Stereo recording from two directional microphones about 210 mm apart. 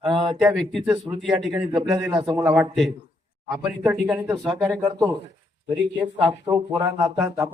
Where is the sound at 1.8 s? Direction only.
15° right (ahead or behind).